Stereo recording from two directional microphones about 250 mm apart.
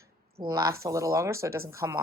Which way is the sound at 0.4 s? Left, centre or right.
Centre.